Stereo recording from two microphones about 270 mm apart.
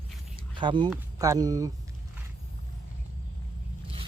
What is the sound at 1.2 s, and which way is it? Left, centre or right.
Speech, centre.